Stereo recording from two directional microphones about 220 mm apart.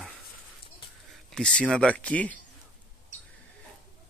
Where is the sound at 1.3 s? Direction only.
5° left (ahead or behind).